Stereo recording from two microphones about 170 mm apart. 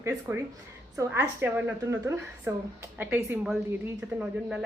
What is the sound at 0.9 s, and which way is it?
A woman's voice, 15° right (ahead or behind).